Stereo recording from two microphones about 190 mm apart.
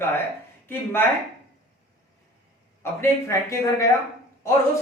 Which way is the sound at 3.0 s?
15° left (ahead or behind).